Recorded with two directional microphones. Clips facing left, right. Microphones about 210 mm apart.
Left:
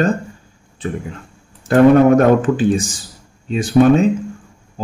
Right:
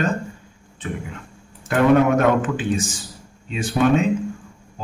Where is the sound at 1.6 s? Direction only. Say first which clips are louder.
Left 6 dB; 40° left (ahead or behind).